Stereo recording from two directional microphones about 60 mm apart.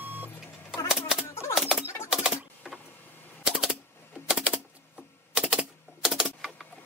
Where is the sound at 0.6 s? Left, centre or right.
Centre.